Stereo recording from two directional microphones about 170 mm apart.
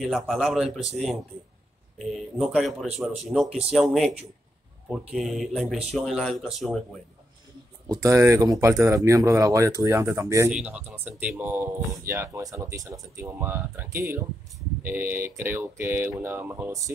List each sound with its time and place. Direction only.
0.0 s speech: centre (ahead or behind)
7.9 s speech: 20° right (ahead or behind)